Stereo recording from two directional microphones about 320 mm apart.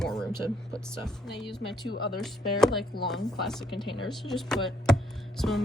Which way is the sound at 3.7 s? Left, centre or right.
Centre.